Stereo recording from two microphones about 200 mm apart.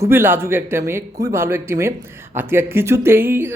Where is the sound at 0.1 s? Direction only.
10° right (ahead or behind).